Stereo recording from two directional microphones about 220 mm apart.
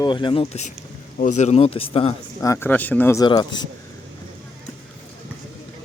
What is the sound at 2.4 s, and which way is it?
Speech, 10° left (ahead or behind).